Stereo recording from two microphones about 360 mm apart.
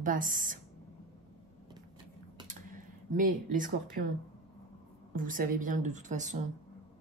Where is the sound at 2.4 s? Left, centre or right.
Right.